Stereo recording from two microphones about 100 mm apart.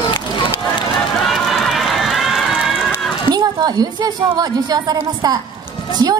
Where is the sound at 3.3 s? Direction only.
45° right (ahead or behind).